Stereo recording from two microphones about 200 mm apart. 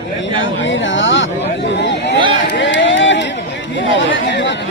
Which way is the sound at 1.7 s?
60° left (ahead or behind).